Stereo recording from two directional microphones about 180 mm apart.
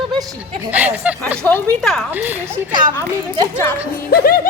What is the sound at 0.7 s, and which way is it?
A child's voice, 10° right (ahead or behind).